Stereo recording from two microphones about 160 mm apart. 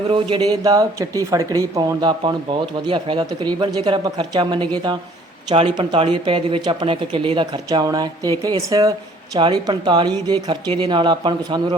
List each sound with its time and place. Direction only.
0.1 s speech: 30° right (ahead or behind)